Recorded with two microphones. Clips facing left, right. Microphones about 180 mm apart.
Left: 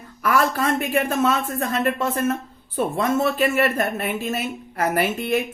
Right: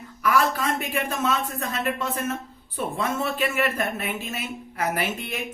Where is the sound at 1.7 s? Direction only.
50° left (ahead or behind).